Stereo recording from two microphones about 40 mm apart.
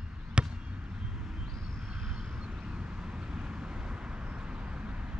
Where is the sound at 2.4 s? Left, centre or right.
Right.